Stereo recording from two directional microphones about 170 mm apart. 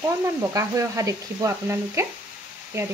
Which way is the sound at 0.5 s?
20° right (ahead or behind).